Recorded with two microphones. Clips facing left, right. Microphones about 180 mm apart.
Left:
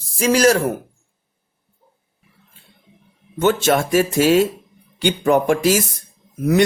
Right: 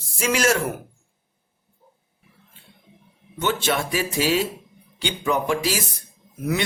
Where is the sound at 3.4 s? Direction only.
45° left (ahead or behind).